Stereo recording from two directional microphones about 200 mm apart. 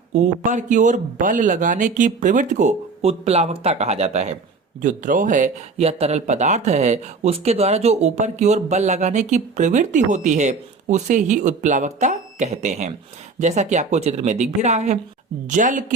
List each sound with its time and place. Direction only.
0.1 s speech: 35° right (ahead or behind)